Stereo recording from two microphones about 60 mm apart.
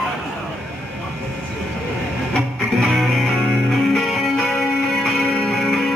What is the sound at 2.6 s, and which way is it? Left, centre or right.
Music, centre.